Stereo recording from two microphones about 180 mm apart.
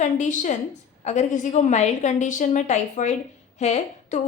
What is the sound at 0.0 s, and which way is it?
A woman's voice, 45° left (ahead or behind).